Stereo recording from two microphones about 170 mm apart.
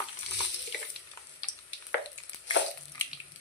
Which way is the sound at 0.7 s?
90° left.